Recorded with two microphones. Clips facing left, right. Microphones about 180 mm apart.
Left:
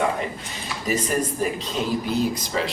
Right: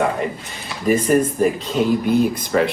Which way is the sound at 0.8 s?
50° right (ahead or behind).